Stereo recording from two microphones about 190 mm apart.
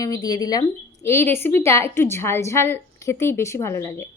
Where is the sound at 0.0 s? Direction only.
20° left (ahead or behind).